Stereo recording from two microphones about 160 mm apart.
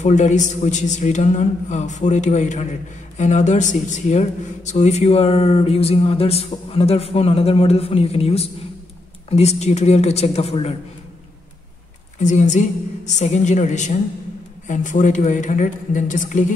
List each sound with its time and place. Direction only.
0.0 s a man's voice: 50° left (ahead or behind)
12.2 s a man's voice: 50° left (ahead or behind)